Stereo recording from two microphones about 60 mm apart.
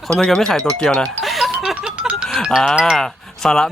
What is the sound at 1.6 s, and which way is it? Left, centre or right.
Music, centre.